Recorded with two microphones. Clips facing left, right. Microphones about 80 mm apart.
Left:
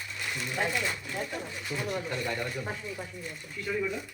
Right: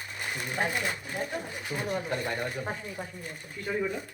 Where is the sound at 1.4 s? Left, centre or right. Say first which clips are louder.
Right 1 dB; right.